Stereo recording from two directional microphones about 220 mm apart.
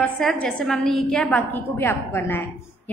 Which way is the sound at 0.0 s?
5° left (ahead or behind).